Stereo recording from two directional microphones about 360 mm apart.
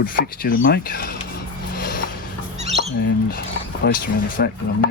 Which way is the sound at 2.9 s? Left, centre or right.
Left.